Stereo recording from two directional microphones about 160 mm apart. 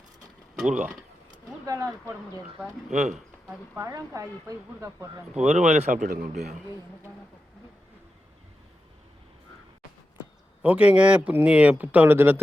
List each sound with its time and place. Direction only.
1.6 s a woman's voice: 20° right (ahead or behind)
2.9 s speech: 50° right (ahead or behind)
3.8 s a woman's voice: 20° right (ahead or behind)
5.4 s speech: 45° right (ahead or behind)
10.6 s speech: 10° right (ahead or behind)